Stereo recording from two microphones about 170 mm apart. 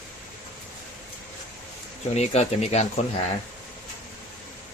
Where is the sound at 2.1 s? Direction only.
40° left (ahead or behind).